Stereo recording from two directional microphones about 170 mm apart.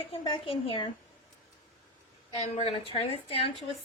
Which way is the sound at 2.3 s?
40° left (ahead or behind).